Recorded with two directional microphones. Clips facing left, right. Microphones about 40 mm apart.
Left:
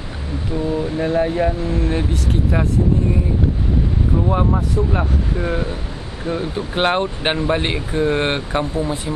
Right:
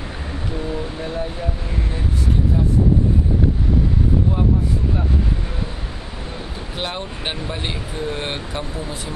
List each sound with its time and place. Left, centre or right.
0.7 s speech: centre
1.1 s speech: left
4.9 s speech: left
6.2 s speech: left